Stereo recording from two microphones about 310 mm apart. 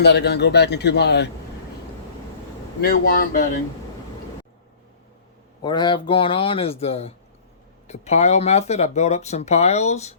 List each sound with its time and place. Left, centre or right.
0.0 s a man's voice: left
2.8 s speech: left
5.6 s speech: centre